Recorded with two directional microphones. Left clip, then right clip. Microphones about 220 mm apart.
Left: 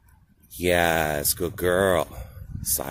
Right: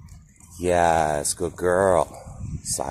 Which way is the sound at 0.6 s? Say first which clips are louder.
Right 2 dB; 25° left (ahead or behind).